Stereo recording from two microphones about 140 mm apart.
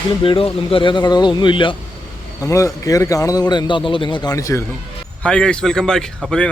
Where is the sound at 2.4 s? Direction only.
20° left (ahead or behind).